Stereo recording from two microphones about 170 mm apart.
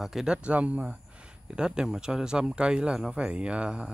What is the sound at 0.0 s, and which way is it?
Speech, centre (ahead or behind).